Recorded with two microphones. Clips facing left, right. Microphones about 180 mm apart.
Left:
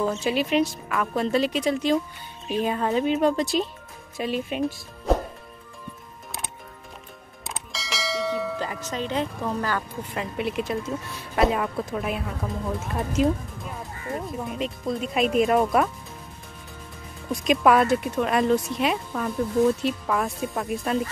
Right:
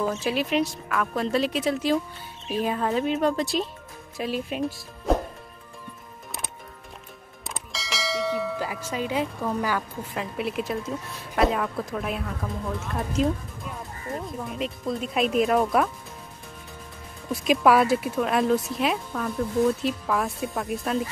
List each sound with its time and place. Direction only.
0.0 s speech: centre (ahead or behind)
7.4 s bell: centre (ahead or behind)
10.1 s speech: centre (ahead or behind)
13.2 s speech: centre (ahead or behind)
17.3 s speech: 5° right (ahead or behind)